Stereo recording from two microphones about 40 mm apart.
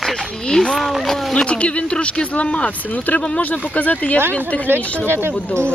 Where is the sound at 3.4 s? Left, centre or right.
Left.